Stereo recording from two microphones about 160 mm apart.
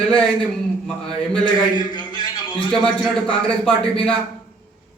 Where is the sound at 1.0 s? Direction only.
5° left (ahead or behind).